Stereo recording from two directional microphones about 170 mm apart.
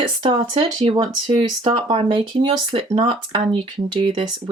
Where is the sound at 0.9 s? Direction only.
30° right (ahead or behind).